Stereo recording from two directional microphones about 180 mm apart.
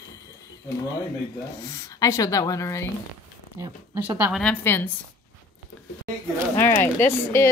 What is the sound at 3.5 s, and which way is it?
Speech, 20° right (ahead or behind).